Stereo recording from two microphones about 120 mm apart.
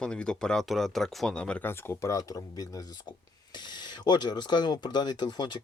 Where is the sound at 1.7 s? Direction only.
25° left (ahead or behind).